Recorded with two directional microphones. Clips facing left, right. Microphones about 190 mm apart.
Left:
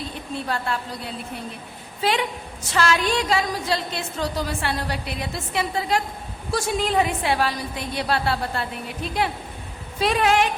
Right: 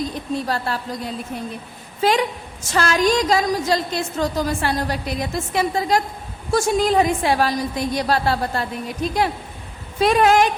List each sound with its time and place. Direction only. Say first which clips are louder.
0.0 s a woman's voice: right 6 dB; 40° right (ahead or behind)
10.0 s a woman's voice: right 5 dB; 45° right (ahead or behind)